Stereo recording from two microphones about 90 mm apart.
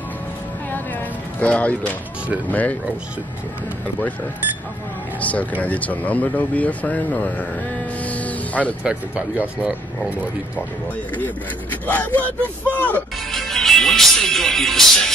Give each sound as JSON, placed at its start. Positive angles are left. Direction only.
{"t": 0.7, "sound": "a sound", "side_deg": 20}
{"t": 2.5, "sound": "speech", "side_deg": 15}
{"t": 5.2, "sound": "speech", "side_deg": 15}
{"t": 8.0, "sound": "music", "side_deg": 15}
{"t": 8.8, "sound": "speech", "side_deg": -15}
{"t": 11.1, "sound": "speech", "side_deg": 20}
{"t": 13.3, "sound": "speech", "side_deg": 5}